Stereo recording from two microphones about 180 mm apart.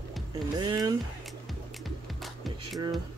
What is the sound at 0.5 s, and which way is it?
Speech, 25° right (ahead or behind).